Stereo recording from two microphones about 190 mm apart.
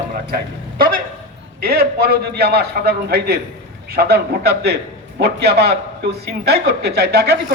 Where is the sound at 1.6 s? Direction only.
55° right (ahead or behind).